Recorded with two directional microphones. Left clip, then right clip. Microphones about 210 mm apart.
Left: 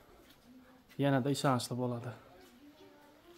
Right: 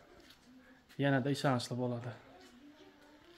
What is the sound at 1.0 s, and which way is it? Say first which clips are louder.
Speech: left 1 dB; 20° left (ahead or behind).